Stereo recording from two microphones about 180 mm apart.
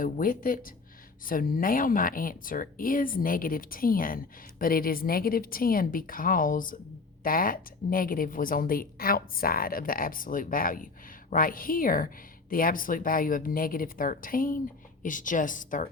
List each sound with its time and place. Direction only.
0.0 s a woman's voice: 50° left (ahead or behind)